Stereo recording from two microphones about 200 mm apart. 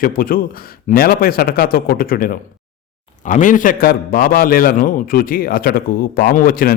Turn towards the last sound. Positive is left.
turn(degrees=45)  # may be behind; listen again after turning